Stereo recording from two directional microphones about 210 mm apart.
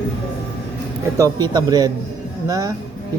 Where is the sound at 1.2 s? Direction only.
20° right (ahead or behind).